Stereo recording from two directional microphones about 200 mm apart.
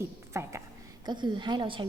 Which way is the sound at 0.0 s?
15° right (ahead or behind).